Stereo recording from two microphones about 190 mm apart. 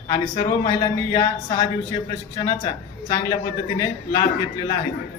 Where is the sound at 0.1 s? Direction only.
20° left (ahead or behind).